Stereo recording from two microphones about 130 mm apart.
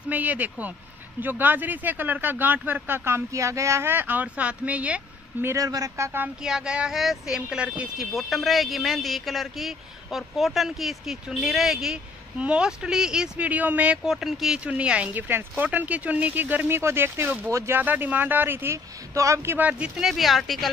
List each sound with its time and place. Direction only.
0.1 s speech: 10° right (ahead or behind)
6.4 s speech: 5° right (ahead or behind)